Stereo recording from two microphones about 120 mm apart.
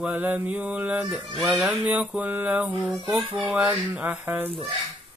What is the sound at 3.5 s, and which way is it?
Mantra, 15° right (ahead or behind).